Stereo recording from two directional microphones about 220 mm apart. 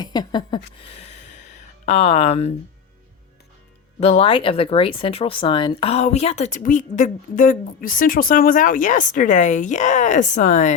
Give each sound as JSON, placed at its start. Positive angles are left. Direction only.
{"t": 0.0, "sound": "speech", "side_deg": 20}
{"t": 4.0, "sound": "speech", "side_deg": 25}